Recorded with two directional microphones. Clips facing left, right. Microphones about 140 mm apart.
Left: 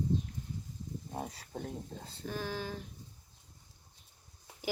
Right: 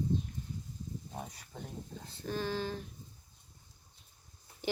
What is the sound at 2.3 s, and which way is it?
Speech, 10° left (ahead or behind).